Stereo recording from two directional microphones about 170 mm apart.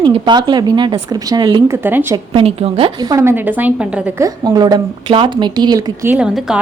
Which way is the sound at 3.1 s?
15° right (ahead or behind).